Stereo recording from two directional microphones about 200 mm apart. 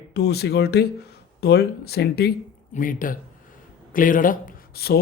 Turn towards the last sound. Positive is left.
turn(degrees=50)  # may be behind; listen again after turning